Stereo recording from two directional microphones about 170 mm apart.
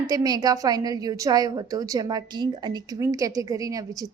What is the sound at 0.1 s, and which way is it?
A woman's voice, 20° right (ahead or behind).